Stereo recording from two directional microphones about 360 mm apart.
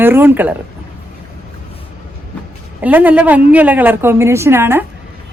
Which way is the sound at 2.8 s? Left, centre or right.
Centre.